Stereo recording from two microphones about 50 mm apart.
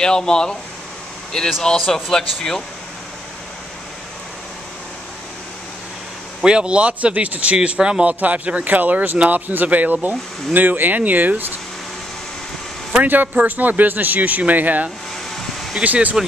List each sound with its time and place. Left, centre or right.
0.0 s speech: centre
1.6 s speech: centre
6.4 s speech: centre; by 11.5 s right
13.0 s speech: right
15.3 s a sound: centre
15.8 s speech: right